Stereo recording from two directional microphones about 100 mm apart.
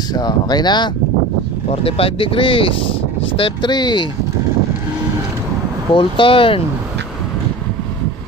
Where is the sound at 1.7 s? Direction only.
70° left (ahead or behind); by 4.1 s 50° left (ahead or behind).